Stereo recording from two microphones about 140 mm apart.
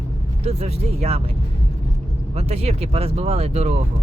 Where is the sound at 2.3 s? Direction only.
45° right (ahead or behind).